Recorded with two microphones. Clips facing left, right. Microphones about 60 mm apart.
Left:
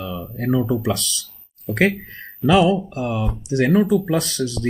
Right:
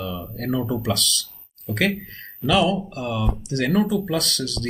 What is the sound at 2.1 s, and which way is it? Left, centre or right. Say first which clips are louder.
Speech: left 4 dB; centre.